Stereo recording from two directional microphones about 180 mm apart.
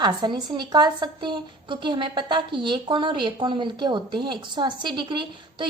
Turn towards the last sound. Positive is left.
turn(degrees=-25)  # may be behind; listen again after turning